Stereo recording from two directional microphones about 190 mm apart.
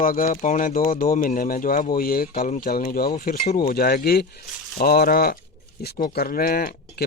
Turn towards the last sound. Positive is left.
turn(degrees=50)  # may be behind; listen again after turning